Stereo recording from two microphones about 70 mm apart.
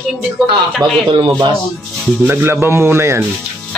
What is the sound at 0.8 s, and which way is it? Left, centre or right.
Speech, right.